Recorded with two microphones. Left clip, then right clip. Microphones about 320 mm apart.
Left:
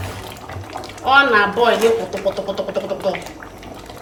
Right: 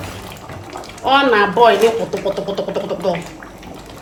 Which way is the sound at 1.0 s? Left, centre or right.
Right.